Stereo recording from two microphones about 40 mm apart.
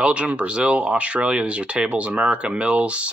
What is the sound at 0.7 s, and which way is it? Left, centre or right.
Speech, right.